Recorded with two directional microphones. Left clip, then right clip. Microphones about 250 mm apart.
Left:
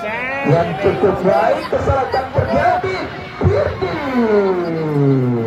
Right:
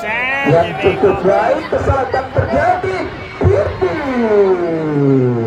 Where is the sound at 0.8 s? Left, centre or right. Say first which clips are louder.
Right 2 dB; centre.